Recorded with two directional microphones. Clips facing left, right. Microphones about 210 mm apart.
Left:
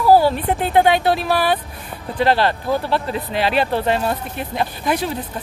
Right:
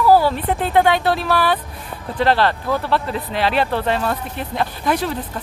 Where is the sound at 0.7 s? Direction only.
15° left (ahead or behind).